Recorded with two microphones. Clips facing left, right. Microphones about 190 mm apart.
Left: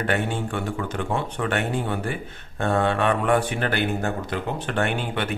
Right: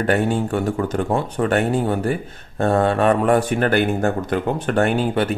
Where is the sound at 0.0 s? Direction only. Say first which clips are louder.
Right 6 dB; 40° right (ahead or behind).